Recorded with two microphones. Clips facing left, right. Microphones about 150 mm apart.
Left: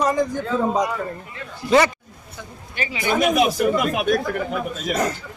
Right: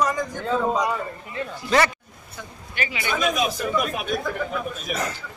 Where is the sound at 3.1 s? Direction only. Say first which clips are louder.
Left 6 dB; 65° left (ahead or behind).